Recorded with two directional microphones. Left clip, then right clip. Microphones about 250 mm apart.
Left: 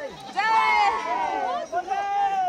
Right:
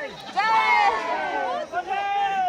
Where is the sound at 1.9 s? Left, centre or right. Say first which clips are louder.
Even; left.